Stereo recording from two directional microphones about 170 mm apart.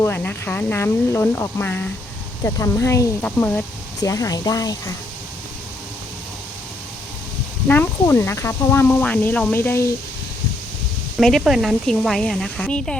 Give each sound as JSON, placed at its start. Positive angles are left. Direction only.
{"t": 0.0, "sound": "speech", "side_deg": 10}
{"t": 4.0, "sound": "speech", "side_deg": 20}
{"t": 7.7, "sound": "speech", "side_deg": 15}
{"t": 11.2, "sound": "speech", "side_deg": 0}